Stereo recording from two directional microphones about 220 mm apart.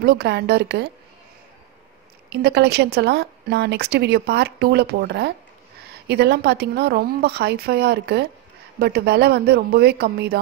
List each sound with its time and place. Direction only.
0.0 s a woman's voice: 45° right (ahead or behind)
2.2 s a woman's voice: 50° right (ahead or behind)